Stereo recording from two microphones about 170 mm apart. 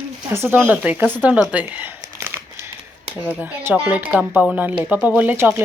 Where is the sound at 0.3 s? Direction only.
15° right (ahead or behind).